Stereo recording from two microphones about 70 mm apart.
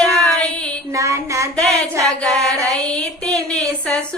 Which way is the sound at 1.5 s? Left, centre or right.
Centre.